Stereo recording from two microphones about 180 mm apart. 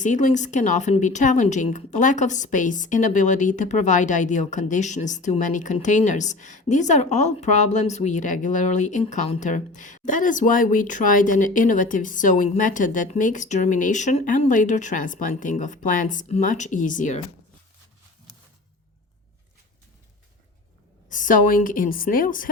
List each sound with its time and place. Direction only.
0.0 s a woman's voice: 45° left (ahead or behind)
21.1 s a woman's voice: 45° left (ahead or behind)